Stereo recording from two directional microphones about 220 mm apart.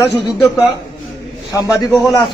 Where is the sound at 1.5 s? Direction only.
15° left (ahead or behind).